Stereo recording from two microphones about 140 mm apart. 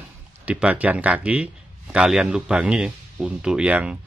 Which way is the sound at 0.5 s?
10° right (ahead or behind).